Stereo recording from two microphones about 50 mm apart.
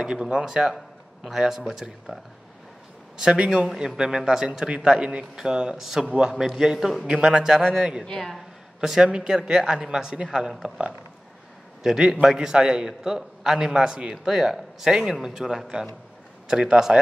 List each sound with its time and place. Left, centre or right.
0.0 s speech: centre
3.2 s speech: centre
6.0 s a man's voice: centre
6.3 s speech: centre
8.0 s speech: centre
8.8 s speech: centre
11.8 s speech: centre